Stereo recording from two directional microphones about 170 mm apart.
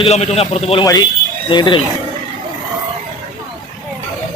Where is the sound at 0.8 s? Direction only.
20° left (ahead or behind).